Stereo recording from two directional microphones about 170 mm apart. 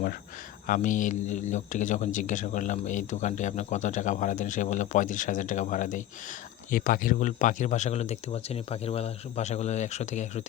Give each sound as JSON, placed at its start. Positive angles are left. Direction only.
{"t": 0.7, "sound": "speech", "side_deg": 50}